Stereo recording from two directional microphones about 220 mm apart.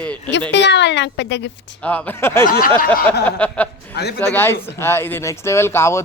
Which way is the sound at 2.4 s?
40° left (ahead or behind).